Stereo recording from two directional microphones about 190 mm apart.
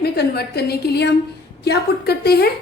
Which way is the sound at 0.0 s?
60° left (ahead or behind).